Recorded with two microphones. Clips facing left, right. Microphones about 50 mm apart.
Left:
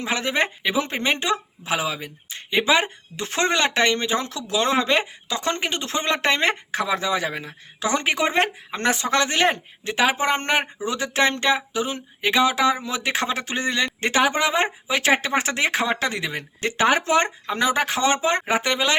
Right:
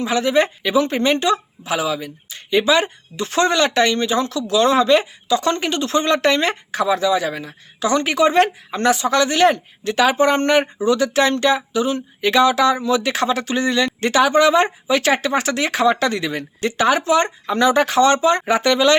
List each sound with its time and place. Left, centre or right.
0.0 s speech: left
9.9 s speech: centre
15.2 s speech: left; by 16.5 s centre
16.6 s speech: left
17.2 s speech: centre